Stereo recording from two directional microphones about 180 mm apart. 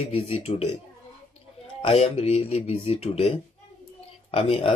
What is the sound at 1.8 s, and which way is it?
Speech, 30° left (ahead or behind).